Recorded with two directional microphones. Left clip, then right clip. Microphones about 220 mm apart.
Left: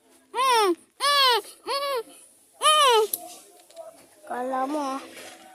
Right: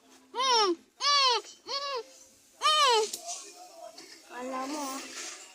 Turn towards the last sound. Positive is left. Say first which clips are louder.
# left 8 dB
turn(degrees=35)  # may be behind; listen again after turning